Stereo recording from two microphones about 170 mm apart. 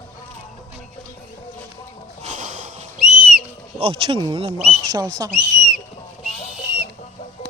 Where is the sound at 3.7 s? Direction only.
35° right (ahead or behind).